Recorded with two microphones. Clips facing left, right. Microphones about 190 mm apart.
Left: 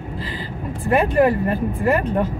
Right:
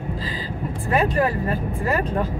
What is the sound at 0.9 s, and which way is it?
Speech, 15° left (ahead or behind).